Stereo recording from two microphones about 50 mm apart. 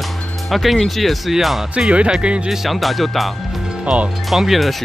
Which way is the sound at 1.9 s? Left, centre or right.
Right.